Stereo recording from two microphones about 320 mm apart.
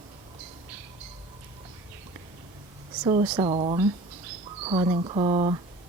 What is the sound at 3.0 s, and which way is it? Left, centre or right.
Speech, centre.